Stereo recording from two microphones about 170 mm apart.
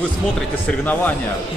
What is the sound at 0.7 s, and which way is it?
Speech, 10° left (ahead or behind).